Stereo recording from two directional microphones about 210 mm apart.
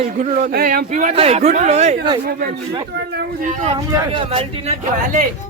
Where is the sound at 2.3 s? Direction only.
45° right (ahead or behind).